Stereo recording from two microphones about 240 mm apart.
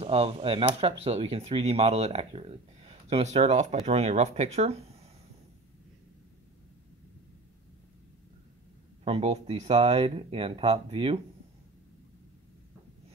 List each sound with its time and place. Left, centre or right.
0.0 s speech: right
9.0 s speech: right